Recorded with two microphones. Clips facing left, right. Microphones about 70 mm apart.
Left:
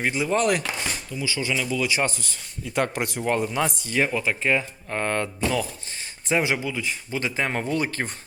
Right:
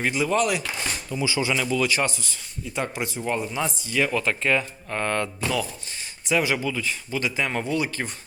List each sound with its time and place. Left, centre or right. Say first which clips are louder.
0.1 s speech: right 1 dB; left
0.3 s speech: left 3 dB; left
1.1 s speech: right 5 dB; right
1.4 s speech: right 1 dB; centre
2.0 s speech: even; left
4.1 s speech: even; centre; by 8.1 s left